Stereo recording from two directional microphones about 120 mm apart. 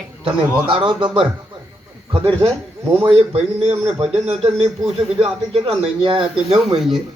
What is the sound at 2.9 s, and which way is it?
Speech, 15° right (ahead or behind).